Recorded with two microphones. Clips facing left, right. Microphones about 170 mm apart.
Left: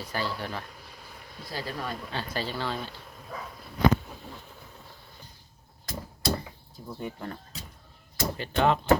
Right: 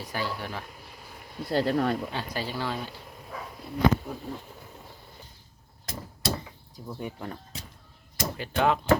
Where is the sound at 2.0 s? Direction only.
15° right (ahead or behind).